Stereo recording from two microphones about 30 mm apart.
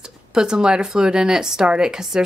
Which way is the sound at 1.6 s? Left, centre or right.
Right.